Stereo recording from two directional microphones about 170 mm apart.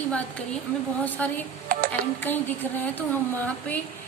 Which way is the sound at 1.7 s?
60° right (ahead or behind).